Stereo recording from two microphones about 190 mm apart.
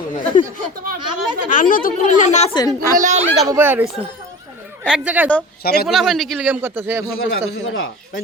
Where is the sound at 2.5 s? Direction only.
15° left (ahead or behind).